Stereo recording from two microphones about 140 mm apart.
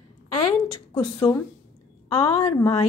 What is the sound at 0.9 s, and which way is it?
A woman's voice, 25° left (ahead or behind).